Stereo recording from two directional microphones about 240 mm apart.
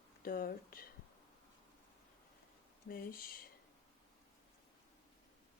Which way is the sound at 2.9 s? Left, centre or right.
Left.